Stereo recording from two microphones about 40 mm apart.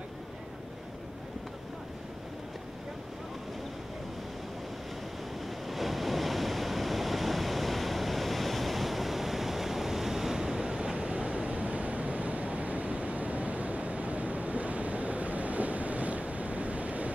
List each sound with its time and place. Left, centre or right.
5.7 s waves: centre; by 17.1 s right